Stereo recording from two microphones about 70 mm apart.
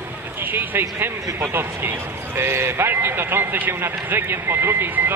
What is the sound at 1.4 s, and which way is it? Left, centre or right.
A man's voice, right.